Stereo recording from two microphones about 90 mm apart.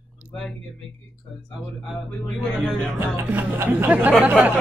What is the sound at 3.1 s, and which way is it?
Music, 25° right (ahead or behind).